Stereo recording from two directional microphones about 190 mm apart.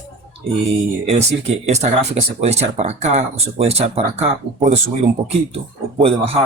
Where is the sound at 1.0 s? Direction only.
35° right (ahead or behind).